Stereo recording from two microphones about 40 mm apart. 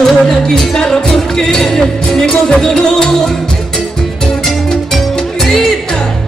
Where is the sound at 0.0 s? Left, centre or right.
Centre.